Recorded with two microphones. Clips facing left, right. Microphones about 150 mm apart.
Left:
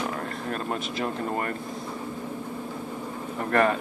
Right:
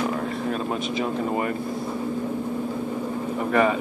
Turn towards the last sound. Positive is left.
turn(degrees=-5)  # may be behind; listen again after turning